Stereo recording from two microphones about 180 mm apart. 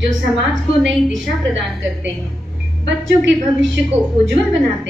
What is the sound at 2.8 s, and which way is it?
Speech, 90° right.